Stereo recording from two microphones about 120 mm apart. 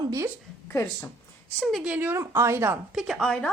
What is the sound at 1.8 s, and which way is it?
Speech, 10° right (ahead or behind).